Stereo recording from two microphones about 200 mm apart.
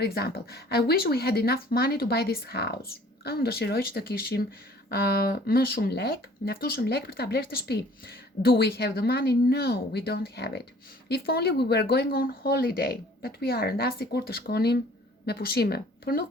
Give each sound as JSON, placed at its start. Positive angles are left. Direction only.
{"t": 0.0, "sound": "speech", "side_deg": 55}